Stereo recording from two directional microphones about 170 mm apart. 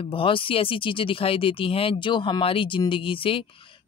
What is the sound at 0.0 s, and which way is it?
Speech, 30° left (ahead or behind).